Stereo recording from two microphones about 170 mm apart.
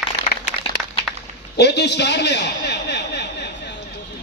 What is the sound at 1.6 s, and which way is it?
A man's voice, 85° left.